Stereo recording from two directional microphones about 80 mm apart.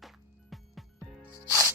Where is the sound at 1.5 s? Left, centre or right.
Right.